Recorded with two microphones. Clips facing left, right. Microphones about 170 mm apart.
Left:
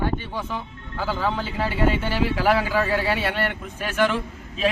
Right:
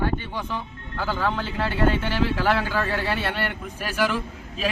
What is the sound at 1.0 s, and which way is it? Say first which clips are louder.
Speech: left 1 dB; 10° left (ahead or behind).